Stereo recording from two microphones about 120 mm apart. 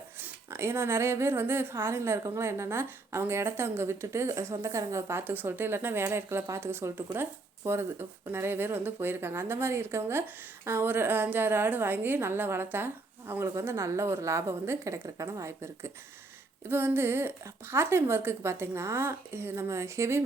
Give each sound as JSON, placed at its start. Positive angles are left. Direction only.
{"t": 0.2, "sound": "speech", "side_deg": -20}